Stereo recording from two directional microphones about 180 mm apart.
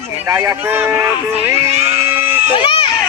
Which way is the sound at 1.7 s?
35° right (ahead or behind).